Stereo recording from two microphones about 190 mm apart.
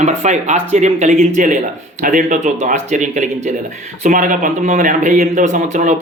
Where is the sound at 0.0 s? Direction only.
35° right (ahead or behind).